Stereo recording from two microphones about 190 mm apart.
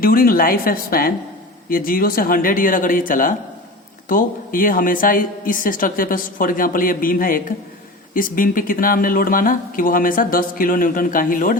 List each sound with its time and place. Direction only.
0.0 s speech: 50° left (ahead or behind)